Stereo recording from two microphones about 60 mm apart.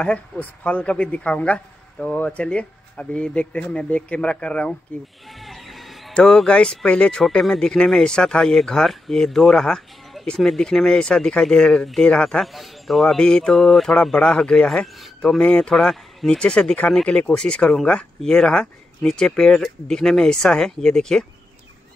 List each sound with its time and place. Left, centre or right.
0.0 s speech: centre
5.4 s music: centre
6.2 s speech: centre
12.5 s speech: centre
14.1 s speech: centre
15.0 s speech: centre
15.4 s speech: centre
15.7 s speech: centre